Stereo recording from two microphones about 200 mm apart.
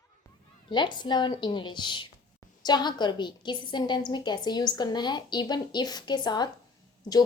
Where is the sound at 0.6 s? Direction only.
20° left (ahead or behind).